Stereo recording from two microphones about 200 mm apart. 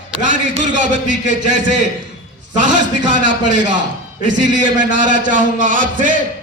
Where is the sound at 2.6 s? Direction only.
40° right (ahead or behind).